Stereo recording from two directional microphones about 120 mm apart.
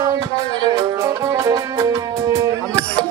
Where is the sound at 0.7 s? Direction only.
30° right (ahead or behind).